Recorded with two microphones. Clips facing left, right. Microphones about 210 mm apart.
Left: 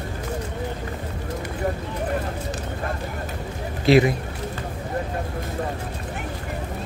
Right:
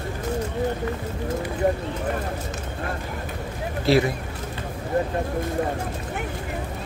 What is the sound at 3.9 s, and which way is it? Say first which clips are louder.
Speech: left 3 dB; 15° left (ahead or behind).